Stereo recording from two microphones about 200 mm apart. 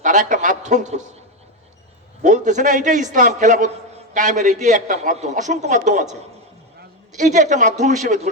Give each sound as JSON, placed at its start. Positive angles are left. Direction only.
{"t": 0.0, "sound": "a man's voice", "side_deg": -40}
{"t": 2.2, "sound": "a man's voice", "side_deg": -40}
{"t": 7.1, "sound": "a man's voice", "side_deg": -35}